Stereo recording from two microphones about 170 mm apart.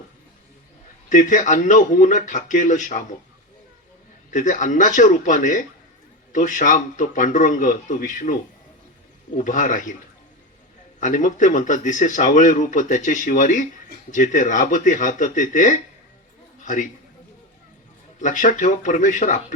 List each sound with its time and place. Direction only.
1.1 s speech: 50° left (ahead or behind)
4.3 s speech: 45° left (ahead or behind)
11.0 s a man's voice: 50° left (ahead or behind)
18.2 s speech: 50° left (ahead or behind)